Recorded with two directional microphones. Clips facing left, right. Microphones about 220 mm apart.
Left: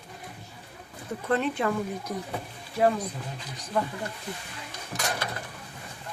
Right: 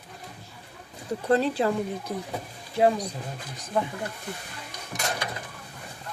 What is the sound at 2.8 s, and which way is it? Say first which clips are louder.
Speech: right 2 dB; 15° right (ahead or behind).